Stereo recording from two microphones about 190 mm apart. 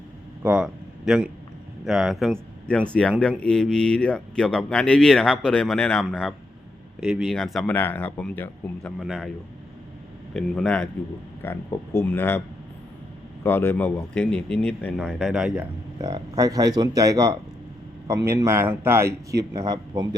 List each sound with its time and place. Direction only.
0.4 s speech: 5° right (ahead or behind)
10.3 s speech: 5° left (ahead or behind)
13.4 s speech: 10° left (ahead or behind)
16.0 s speech: 20° right (ahead or behind)